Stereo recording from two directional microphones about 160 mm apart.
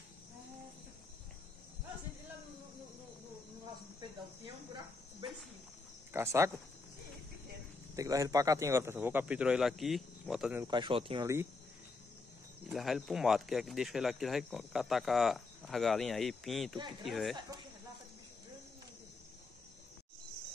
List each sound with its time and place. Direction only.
6.1 s a man's voice: 15° right (ahead or behind)
7.9 s a man's voice: 20° right (ahead or behind); by 10.6 s centre (ahead or behind)
10.7 s speech: 30° right (ahead or behind)
12.7 s speech: centre (ahead or behind)